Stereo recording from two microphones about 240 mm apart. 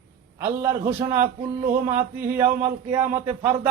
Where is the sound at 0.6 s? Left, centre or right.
Centre.